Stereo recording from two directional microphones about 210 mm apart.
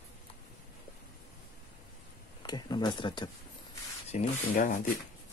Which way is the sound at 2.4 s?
20° left (ahead or behind).